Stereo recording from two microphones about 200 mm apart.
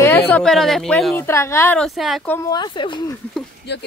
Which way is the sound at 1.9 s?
Centre (ahead or behind).